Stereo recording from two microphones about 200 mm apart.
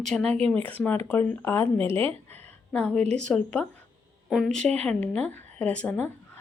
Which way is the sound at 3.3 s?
5° left (ahead or behind).